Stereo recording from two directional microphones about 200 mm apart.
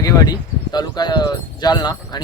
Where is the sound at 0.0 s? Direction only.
20° left (ahead or behind).